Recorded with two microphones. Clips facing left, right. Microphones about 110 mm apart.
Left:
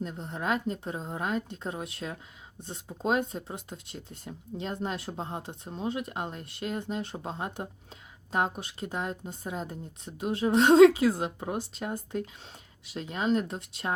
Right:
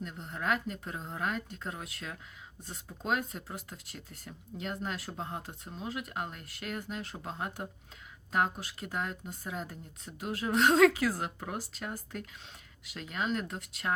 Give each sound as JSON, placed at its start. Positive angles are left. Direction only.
{"t": 0.0, "sound": "speech", "side_deg": 25}